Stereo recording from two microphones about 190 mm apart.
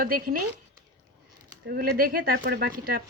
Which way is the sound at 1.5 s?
50° right (ahead or behind).